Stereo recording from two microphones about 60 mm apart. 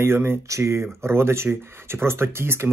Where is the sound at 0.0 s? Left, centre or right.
Right.